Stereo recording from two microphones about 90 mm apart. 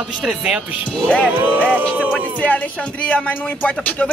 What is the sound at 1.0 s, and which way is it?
Speech, 10° left (ahead or behind).